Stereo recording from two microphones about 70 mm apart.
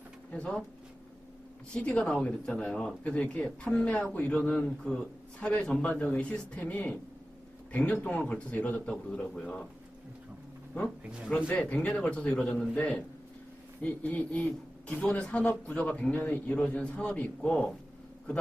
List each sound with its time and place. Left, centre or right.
0.3 s speech: centre
1.7 s a man's voice: centre
11.3 s a man's voice: left